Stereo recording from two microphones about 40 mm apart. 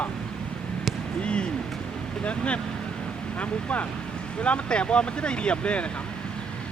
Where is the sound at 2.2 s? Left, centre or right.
Left.